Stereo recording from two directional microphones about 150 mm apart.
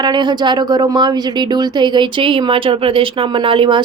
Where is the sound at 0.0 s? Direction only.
30° right (ahead or behind).